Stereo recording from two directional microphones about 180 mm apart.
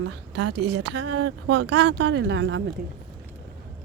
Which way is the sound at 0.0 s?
80° right.